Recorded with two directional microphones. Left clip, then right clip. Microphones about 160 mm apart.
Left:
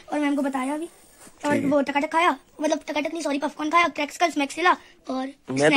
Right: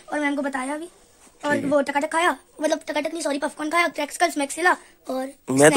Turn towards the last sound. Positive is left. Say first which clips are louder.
# right 5 dB
turn(degrees=-45)  # may be behind; listen again after turning